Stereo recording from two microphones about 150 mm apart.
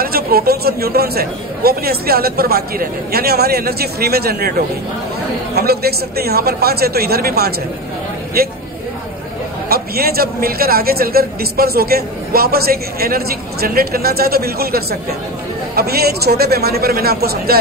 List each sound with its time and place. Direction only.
0.0 s a man's voice: 85° right
9.7 s a man's voice: 90° right